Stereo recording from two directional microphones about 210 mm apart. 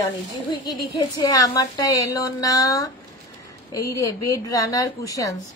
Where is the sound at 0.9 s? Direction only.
20° left (ahead or behind).